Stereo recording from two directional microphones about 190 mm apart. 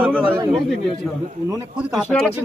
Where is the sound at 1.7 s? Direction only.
Centre (ahead or behind).